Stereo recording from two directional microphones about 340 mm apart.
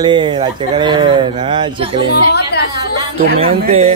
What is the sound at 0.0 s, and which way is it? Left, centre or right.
Speech, centre.